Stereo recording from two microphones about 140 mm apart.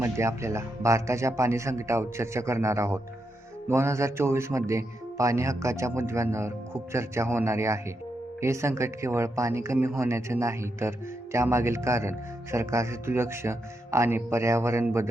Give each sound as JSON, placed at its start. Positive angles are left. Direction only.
{"t": 0.0, "sound": "speech", "side_deg": -20}